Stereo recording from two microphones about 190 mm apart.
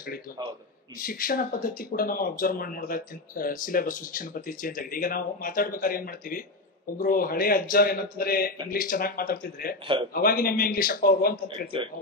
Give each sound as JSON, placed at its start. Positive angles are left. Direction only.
{"t": 0.9, "sound": "speech", "side_deg": 50}